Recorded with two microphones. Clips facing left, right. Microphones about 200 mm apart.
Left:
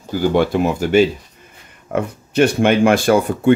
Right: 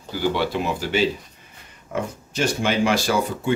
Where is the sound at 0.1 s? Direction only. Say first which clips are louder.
Left 7 dB; 50° left (ahead or behind).